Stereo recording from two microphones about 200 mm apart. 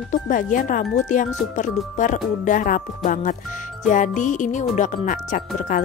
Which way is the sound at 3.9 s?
40° left (ahead or behind).